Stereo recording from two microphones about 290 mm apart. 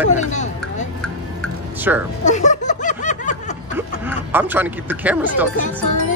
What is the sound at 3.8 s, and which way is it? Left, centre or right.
Speech, centre.